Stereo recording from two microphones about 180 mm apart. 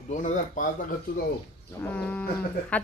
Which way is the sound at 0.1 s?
45° left (ahead or behind).